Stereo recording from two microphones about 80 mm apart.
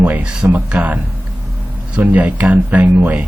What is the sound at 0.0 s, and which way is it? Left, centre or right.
Speech, centre.